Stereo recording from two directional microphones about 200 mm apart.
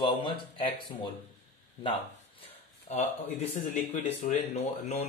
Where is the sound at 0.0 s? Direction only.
25° left (ahead or behind).